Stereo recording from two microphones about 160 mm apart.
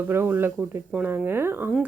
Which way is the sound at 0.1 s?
15° right (ahead or behind).